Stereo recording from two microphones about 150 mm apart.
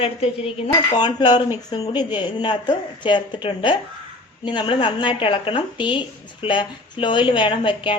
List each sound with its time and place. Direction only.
0.0 s speech: 40° left (ahead or behind)
0.9 s speech: 30° left (ahead or behind)